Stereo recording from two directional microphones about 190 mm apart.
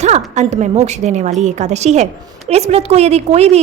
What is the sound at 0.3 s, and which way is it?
A woman's voice, 40° right (ahead or behind).